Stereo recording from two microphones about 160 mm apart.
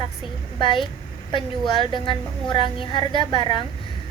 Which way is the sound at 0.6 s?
30° left (ahead or behind).